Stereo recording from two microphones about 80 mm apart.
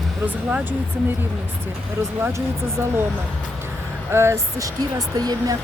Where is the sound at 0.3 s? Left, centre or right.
Right.